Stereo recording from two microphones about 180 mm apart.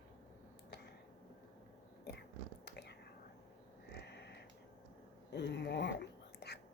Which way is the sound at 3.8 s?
70° left (ahead or behind).